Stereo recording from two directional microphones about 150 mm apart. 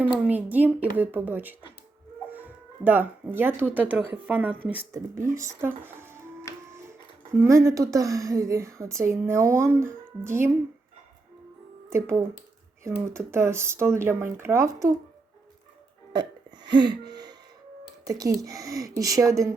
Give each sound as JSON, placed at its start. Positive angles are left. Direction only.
{"t": 0.0, "sound": "speech", "side_deg": -10}
{"t": 7.3, "sound": "a woman's voice", "side_deg": -20}
{"t": 11.9, "sound": "speech", "side_deg": -15}
{"t": 16.6, "sound": "a woman's voice", "side_deg": -30}
{"t": 17.1, "sound": "a sound", "side_deg": -25}
{"t": 18.1, "sound": "a woman's voice", "side_deg": -25}